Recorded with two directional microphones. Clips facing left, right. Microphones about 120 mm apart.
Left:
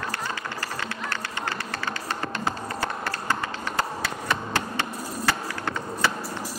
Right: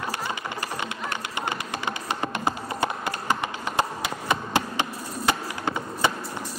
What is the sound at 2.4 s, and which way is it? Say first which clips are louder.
Music: right 2 dB; 15° right (ahead or behind).